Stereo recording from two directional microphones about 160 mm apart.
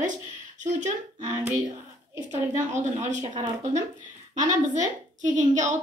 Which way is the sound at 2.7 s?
50° right (ahead or behind).